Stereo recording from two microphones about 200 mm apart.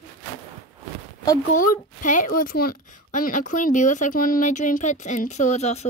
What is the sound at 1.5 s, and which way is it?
A woman's voice, 40° left (ahead or behind).